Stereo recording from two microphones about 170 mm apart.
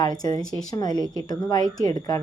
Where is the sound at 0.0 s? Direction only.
25° left (ahead or behind).